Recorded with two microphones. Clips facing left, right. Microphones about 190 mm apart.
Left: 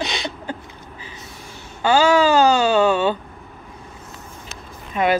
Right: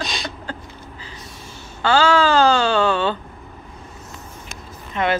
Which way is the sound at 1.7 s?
15° left (ahead or behind).